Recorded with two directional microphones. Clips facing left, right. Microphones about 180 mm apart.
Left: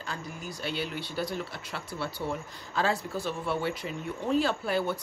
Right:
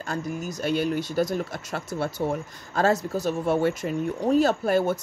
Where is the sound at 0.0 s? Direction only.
45° right (ahead or behind).